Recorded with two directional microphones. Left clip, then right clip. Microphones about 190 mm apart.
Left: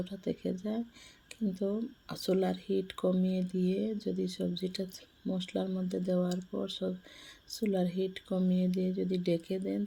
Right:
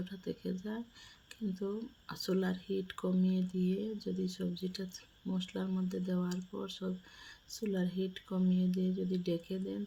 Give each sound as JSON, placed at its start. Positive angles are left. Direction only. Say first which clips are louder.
{"t": 0.0, "sound": "speech", "louder": "left 6 dB", "side_deg": 15}
{"t": 1.3, "sound": "a sound", "louder": "left 6 dB", "side_deg": 20}
{"t": 1.6, "sound": "speech", "louder": "left 5 dB", "side_deg": 20}